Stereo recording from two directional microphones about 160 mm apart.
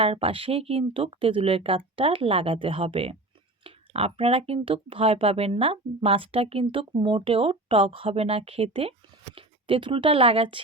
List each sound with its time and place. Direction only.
0.0 s speech: 35° right (ahead or behind)